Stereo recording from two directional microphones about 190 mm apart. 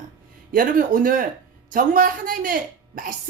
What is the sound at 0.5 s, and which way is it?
Speech, 45° right (ahead or behind).